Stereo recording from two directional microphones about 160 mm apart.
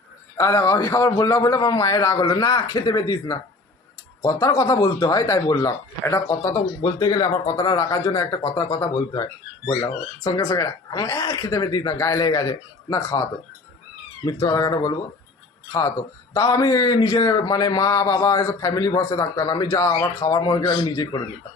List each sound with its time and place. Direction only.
0.3 s a man's voice: 20° left (ahead or behind)
14.3 s a man's voice: 25° left (ahead or behind)